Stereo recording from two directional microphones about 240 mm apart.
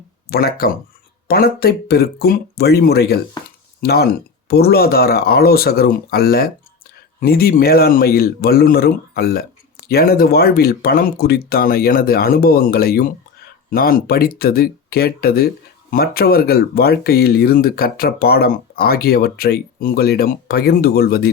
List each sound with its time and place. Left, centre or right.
0.3 s speech: left